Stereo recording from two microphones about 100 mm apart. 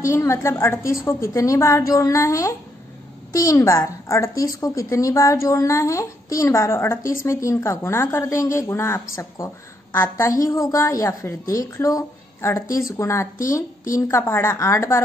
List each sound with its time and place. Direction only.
0.0 s a woman's voice: 30° left (ahead or behind)